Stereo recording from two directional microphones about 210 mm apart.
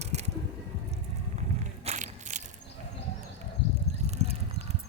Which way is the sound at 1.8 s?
35° right (ahead or behind).